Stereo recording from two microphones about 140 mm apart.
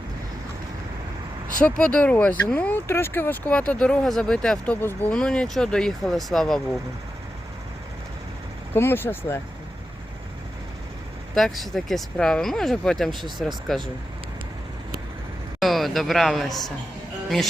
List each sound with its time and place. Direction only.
1.6 s speech: 10° left (ahead or behind)
8.7 s speech: 15° left (ahead or behind)
11.3 s speech: centre (ahead or behind)
15.6 s speech: centre (ahead or behind)